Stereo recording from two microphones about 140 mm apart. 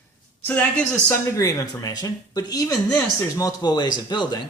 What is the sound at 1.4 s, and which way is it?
Speech, 25° left (ahead or behind).